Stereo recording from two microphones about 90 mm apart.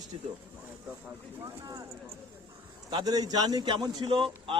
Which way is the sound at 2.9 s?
55° right (ahead or behind).